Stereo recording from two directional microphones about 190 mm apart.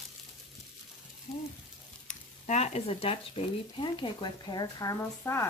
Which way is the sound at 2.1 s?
40° left (ahead or behind).